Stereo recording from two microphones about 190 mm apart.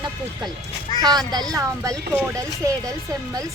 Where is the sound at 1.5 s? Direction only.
15° right (ahead or behind).